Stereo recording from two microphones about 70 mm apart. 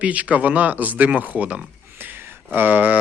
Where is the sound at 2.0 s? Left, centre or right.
Right.